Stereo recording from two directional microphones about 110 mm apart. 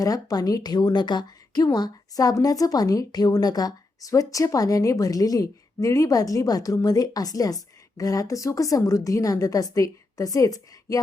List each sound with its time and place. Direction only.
0.0 s speech: 35° left (ahead or behind)